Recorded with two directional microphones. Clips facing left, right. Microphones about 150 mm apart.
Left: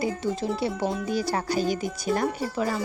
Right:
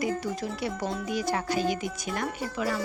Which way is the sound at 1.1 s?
35° left (ahead or behind).